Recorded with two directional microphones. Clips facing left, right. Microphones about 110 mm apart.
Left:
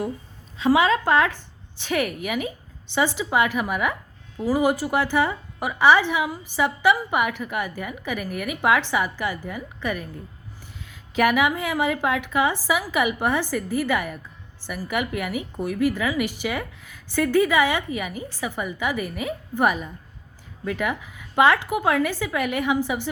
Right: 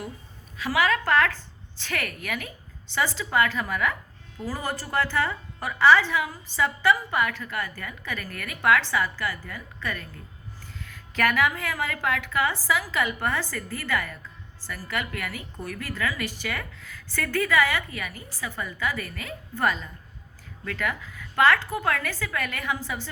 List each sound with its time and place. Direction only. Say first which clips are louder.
0.5 s a woman's voice: left 6 dB; 25° left (ahead or behind)